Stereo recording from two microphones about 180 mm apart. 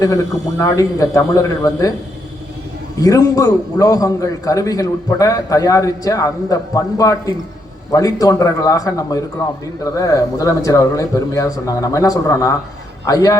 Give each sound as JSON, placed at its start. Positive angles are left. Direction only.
{"t": 0.6, "sound": "a man's voice", "side_deg": 20}
{"t": 3.0, "sound": "a man's voice", "side_deg": 20}